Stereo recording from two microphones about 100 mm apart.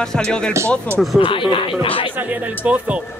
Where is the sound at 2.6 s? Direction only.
10° right (ahead or behind).